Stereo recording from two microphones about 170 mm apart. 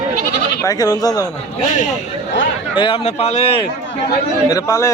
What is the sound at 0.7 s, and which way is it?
Speech, 20° left (ahead or behind).